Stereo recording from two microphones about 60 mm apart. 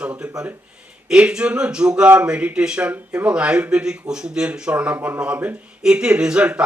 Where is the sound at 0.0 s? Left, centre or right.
Centre.